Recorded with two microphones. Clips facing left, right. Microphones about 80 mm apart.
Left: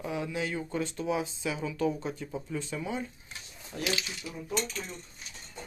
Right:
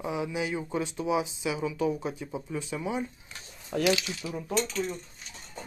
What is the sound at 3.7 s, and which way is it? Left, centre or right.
Speech, right.